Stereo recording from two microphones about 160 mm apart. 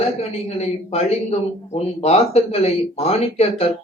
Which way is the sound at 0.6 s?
40° left (ahead or behind).